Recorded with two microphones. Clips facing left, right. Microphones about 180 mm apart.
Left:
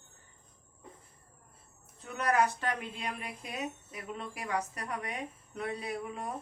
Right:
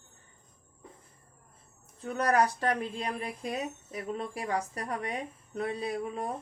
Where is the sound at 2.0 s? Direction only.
35° right (ahead or behind).